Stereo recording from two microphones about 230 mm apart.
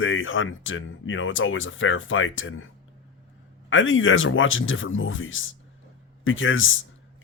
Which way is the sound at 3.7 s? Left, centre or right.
Left.